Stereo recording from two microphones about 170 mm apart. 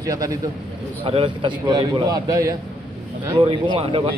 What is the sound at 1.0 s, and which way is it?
A man's voice, 30° right (ahead or behind).